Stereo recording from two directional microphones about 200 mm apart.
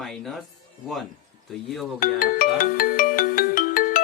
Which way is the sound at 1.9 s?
45° left (ahead or behind).